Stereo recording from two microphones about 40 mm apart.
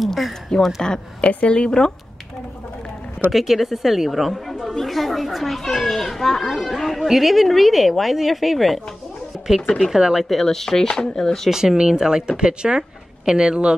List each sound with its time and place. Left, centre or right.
0.0 s speech: centre
1.4 s speech: left
3.3 s a woman's voice: centre
9.9 s speech: centre
10.2 s speech: centre
11.7 s a woman's voice: centre